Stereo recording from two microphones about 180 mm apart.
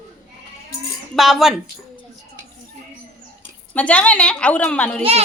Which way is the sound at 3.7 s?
5° left (ahead or behind).